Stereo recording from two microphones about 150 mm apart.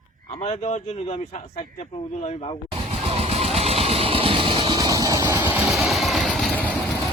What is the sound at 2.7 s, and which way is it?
Vehicle, 40° right (ahead or behind).